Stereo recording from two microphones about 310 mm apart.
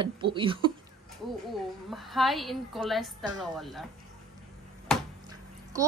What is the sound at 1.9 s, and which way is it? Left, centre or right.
Speech, centre.